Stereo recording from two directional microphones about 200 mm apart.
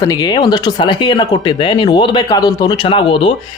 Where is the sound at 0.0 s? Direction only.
20° left (ahead or behind).